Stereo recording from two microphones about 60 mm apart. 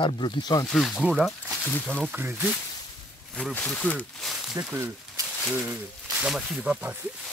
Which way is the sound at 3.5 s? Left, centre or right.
Left.